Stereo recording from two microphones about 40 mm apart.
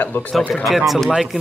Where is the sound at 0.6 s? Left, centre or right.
Centre.